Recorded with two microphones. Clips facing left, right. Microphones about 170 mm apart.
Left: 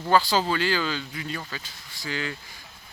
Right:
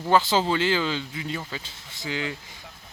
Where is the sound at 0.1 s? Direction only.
20° right (ahead or behind).